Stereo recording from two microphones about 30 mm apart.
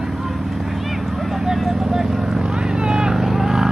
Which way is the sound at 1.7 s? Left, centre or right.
Centre.